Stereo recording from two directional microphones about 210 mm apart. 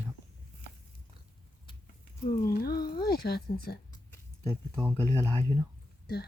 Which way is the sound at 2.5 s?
45° left (ahead or behind).